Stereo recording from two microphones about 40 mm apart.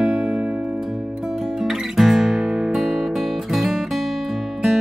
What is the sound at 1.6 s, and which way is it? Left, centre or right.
Guitar, centre.